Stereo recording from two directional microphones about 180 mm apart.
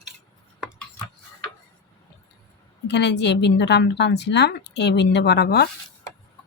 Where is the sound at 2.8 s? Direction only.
70° left (ahead or behind).